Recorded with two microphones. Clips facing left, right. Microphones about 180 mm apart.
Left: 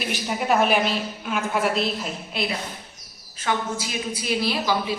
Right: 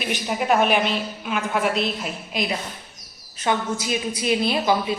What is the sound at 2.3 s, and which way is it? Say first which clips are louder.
A woman's voice: right 2 dB; 15° right (ahead or behind).